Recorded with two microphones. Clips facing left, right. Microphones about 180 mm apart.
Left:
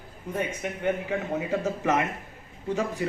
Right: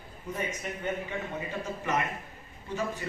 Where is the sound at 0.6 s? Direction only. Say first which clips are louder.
Left 6 dB; 80° left.